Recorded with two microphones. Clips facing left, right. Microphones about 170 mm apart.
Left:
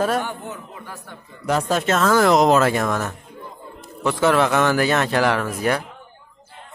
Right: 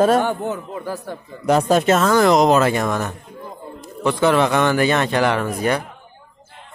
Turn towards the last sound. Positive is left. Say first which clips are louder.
# right 1 dB
turn(degrees=0)  # may be behind; listen again after turning